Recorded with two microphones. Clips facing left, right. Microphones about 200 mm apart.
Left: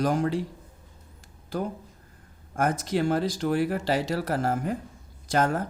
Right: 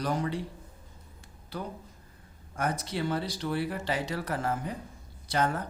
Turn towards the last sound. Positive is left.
turn(degrees=45)  # may be behind; listen again after turning